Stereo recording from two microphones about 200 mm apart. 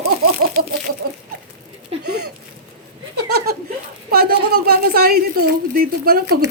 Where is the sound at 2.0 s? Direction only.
55° right (ahead or behind).